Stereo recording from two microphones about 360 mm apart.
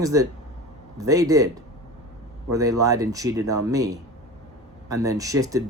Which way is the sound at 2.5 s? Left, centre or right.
Centre.